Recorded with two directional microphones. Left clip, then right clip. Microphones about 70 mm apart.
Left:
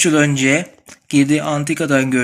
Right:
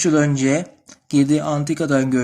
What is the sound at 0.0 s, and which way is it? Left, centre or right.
Speech, right.